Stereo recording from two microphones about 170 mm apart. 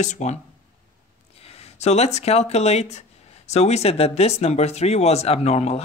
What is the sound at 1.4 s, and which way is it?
Speech, 35° left (ahead or behind).